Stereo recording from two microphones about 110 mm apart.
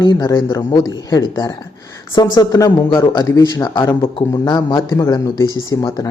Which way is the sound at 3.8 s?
50° left (ahead or behind).